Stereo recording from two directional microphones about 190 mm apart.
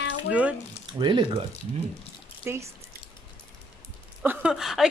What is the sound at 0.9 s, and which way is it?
Speech, 25° right (ahead or behind).